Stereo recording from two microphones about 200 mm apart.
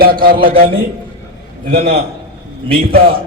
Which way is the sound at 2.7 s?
50° right (ahead or behind).